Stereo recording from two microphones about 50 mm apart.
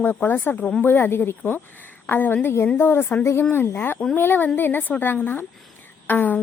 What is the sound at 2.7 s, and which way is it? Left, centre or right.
A woman's voice, left.